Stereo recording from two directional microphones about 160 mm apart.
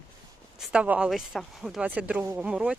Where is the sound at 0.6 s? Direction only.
5° right (ahead or behind).